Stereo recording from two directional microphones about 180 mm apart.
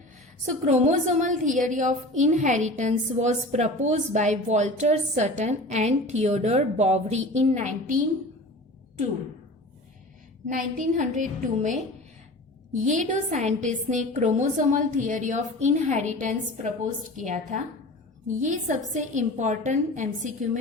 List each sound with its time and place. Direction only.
0.4 s a woman's voice: 40° right (ahead or behind)
10.4 s a woman's voice: 45° right (ahead or behind)